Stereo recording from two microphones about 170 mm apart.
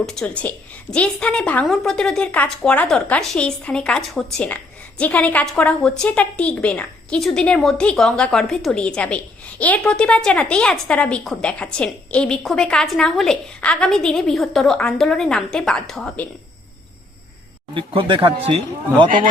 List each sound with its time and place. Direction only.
0.0 s a woman's voice: 5° left (ahead or behind)
17.7 s speech: 30° right (ahead or behind)
19.0 s a man's voice: 55° right (ahead or behind)